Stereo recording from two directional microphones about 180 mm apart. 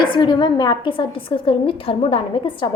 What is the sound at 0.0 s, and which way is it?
A woman's voice, 25° left (ahead or behind).